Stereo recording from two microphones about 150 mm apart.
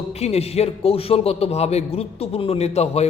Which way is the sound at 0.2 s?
45° left (ahead or behind).